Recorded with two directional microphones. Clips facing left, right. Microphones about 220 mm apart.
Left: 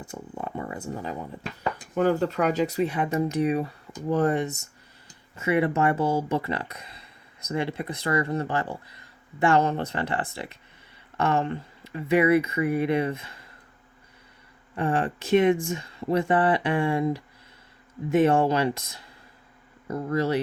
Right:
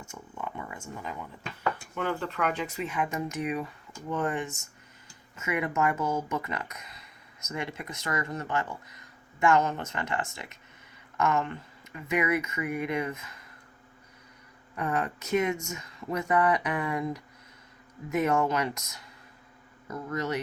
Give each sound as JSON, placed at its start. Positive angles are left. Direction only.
{"t": 0.0, "sound": "speech", "side_deg": 35}
{"t": 14.8, "sound": "speech", "side_deg": 30}